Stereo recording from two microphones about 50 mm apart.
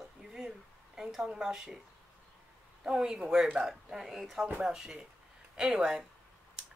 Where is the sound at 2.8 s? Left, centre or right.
Centre.